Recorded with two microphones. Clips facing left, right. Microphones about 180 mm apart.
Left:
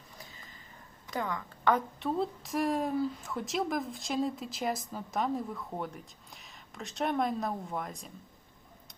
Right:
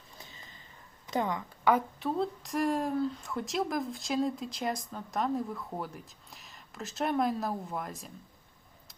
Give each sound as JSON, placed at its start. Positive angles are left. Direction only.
{"t": 1.1, "sound": "a woman's voice", "side_deg": -20}
{"t": 1.6, "sound": "a woman's voice", "side_deg": -5}